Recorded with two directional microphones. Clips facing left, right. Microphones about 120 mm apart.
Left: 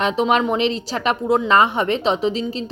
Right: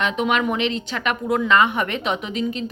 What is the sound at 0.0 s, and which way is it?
Speech, 35° left (ahead or behind).